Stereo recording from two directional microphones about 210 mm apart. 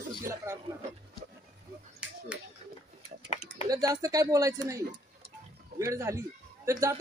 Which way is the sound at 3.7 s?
15° right (ahead or behind).